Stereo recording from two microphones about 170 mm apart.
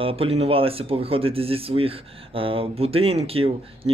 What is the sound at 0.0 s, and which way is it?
Speech, 35° right (ahead or behind).